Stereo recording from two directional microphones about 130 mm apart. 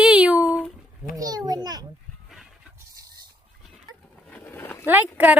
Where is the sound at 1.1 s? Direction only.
30° right (ahead or behind).